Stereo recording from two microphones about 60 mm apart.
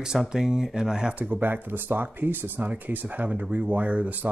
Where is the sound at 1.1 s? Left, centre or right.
Right.